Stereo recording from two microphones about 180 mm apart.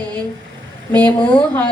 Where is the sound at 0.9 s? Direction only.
25° right (ahead or behind).